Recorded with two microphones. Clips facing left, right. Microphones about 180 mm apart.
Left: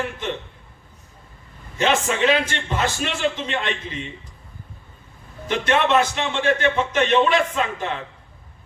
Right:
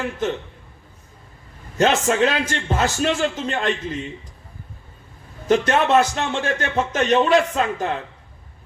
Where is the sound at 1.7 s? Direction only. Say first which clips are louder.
Right 3 dB; 40° right (ahead or behind).